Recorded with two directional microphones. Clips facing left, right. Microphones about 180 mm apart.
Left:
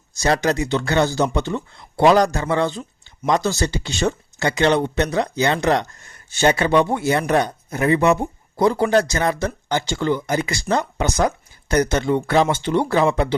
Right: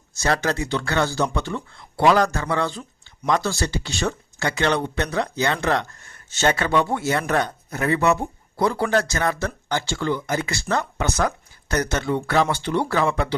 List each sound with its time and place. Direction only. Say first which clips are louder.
0.1 s speech: left 4 dB; 15° left (ahead or behind)